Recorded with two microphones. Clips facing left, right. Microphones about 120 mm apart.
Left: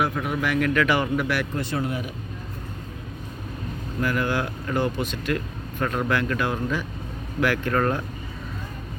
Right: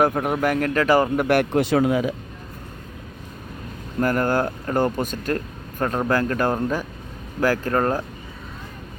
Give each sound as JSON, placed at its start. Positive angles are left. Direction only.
{"t": 0.0, "sound": "speech", "side_deg": -45}
{"t": 1.6, "sound": "speech", "side_deg": -90}
{"t": 4.0, "sound": "speech", "side_deg": -45}